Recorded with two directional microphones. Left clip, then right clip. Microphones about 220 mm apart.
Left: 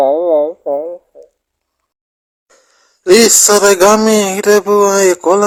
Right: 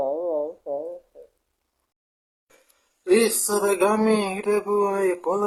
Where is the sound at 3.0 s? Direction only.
40° left (ahead or behind).